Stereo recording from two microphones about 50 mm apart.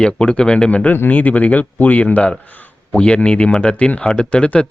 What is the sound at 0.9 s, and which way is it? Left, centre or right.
Speech, left.